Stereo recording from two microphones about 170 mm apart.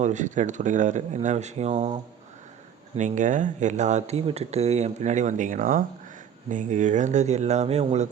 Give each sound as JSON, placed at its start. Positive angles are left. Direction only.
{"t": 0.0, "sound": "speech", "side_deg": -45}